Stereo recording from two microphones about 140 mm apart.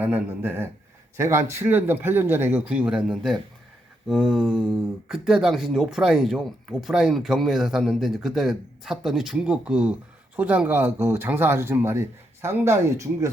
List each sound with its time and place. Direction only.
0.0 s speech: 15° right (ahead or behind)